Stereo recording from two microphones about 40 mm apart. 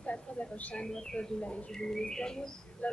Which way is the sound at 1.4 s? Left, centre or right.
Left.